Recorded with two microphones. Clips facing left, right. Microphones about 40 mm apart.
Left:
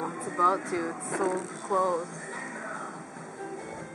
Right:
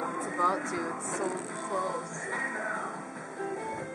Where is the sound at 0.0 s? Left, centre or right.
Centre.